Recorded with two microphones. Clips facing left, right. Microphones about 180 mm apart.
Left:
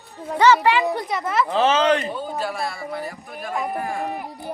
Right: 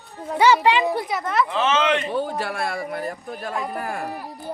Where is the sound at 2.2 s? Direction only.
65° right (ahead or behind).